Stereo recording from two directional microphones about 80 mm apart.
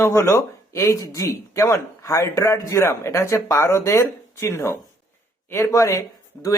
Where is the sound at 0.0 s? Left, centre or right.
Left.